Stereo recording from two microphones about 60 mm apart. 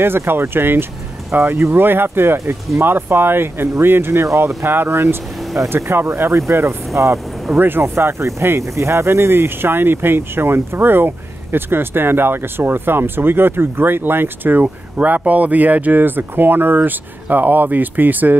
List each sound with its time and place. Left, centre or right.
0.0 s speech: right
7.8 s speech: right